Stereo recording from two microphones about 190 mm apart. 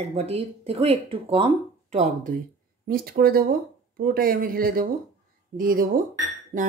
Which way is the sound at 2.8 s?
50° right (ahead or behind).